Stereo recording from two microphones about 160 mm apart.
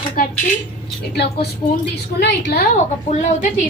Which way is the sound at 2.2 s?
90° left.